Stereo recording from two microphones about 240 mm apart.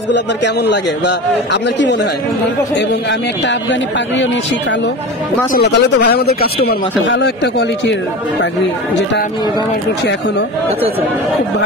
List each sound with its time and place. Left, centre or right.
0.7 s speech: left
5.5 s speech: left